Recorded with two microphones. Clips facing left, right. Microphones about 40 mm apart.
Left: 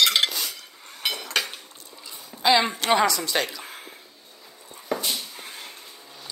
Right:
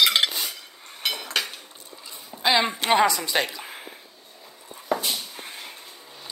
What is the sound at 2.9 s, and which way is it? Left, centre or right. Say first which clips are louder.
Speech: right 1 dB; centre.